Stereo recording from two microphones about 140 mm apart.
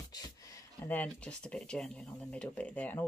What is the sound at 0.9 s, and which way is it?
Speech, 5° left (ahead or behind).